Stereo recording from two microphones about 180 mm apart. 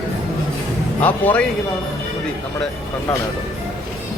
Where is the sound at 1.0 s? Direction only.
10° left (ahead or behind).